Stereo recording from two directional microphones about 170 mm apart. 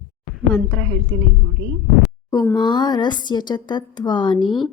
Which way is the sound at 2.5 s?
25° left (ahead or behind).